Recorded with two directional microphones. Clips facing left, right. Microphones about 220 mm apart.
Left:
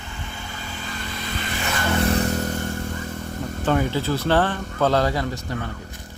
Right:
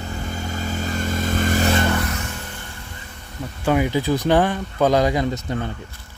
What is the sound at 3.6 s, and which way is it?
Speech, 10° right (ahead or behind).